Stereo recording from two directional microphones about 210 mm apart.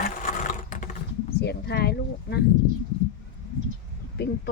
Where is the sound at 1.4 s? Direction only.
50° left (ahead or behind).